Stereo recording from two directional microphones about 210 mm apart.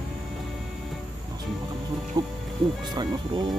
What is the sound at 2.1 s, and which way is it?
Speech, 15° right (ahead or behind).